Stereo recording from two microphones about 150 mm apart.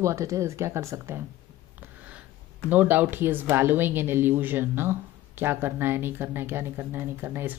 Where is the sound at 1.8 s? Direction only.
10° right (ahead or behind).